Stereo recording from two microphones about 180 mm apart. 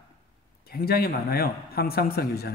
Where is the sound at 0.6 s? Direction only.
55° left (ahead or behind).